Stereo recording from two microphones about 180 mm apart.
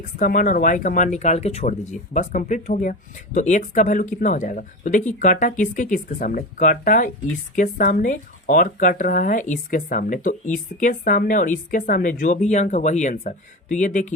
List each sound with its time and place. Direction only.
0.2 s speech: 45° left (ahead or behind)